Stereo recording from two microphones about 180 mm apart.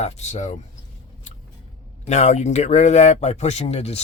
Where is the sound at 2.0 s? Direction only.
40° left (ahead or behind).